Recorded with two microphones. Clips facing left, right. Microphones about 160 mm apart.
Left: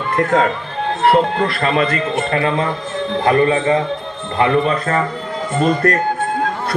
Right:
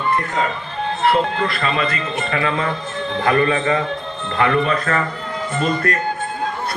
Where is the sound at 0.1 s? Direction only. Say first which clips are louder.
Left 8 dB; 90° left.